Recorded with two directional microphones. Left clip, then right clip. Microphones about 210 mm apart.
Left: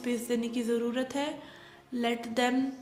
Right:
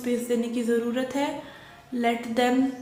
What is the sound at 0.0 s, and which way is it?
A woman's voice, 35° left (ahead or behind).